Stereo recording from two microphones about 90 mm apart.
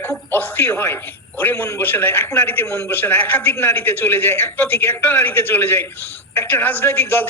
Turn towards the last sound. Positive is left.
turn(degrees=20)  # may be behind; listen again after turning